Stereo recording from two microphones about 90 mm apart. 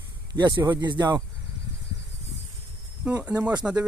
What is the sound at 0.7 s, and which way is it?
Speech, 55° right (ahead or behind).